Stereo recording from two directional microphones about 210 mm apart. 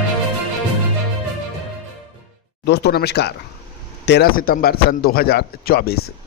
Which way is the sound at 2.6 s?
50° left (ahead or behind).